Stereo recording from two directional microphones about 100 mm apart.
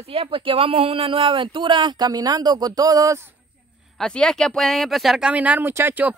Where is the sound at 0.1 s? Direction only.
65° right (ahead or behind); by 3.2 s 35° right (ahead or behind).